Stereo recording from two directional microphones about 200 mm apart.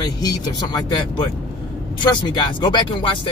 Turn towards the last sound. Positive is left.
turn(degrees=25)  # may be behind; listen again after turning